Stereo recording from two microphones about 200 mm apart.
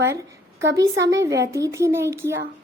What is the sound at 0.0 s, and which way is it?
A woman's voice, 15° right (ahead or behind).